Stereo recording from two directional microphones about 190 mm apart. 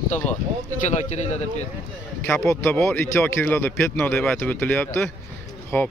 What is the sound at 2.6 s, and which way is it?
Speech, 10° left (ahead or behind).